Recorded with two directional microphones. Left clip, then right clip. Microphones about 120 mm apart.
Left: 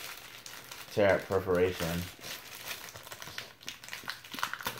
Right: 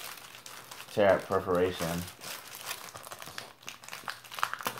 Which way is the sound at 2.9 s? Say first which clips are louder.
Right 1 dB; 20° left (ahead or behind).